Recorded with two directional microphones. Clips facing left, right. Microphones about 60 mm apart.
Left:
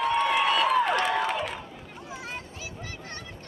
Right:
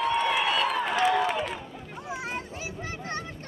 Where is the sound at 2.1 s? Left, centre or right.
Centre.